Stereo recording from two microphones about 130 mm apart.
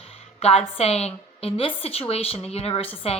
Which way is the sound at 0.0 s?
50° left (ahead or behind).